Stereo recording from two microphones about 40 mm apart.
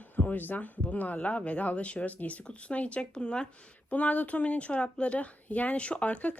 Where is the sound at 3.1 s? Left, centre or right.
Left.